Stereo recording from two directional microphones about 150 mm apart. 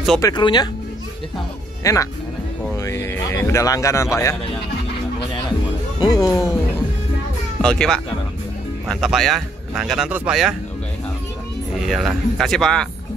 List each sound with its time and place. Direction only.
0.2 s speech: 30° left (ahead or behind)
1.8 s speech: 20° left (ahead or behind)
5.9 s music: 25° left (ahead or behind)
7.6 s speech: 5° left (ahead or behind)
11.8 s speech: centre (ahead or behind)